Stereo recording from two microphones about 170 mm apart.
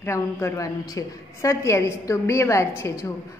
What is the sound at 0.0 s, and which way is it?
A woman's voice, 15° left (ahead or behind).